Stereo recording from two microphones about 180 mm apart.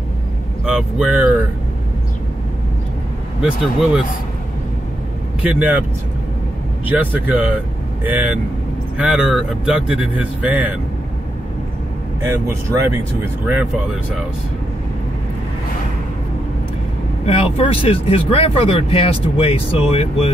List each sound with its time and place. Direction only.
0.7 s speech: 5° right (ahead or behind)
3.4 s speech: 5° right (ahead or behind)
5.4 s speech: 5° right (ahead or behind)
6.9 s speech: 10° right (ahead or behind)
12.3 s speech: 15° right (ahead or behind)
17.3 s speech: 30° left (ahead or behind)